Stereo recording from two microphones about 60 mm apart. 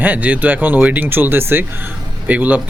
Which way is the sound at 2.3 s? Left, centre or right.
Right.